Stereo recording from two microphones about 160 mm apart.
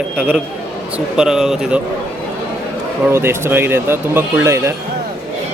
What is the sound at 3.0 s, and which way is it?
A man's voice, 15° right (ahead or behind).